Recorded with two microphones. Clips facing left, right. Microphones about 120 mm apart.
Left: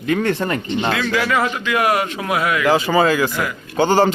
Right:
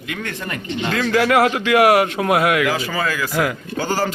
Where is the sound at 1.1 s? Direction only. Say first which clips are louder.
Right 4 dB; 60° right (ahead or behind).